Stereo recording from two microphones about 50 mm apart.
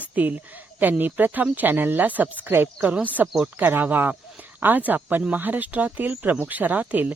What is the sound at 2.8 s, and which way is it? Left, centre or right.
A woman's voice, right.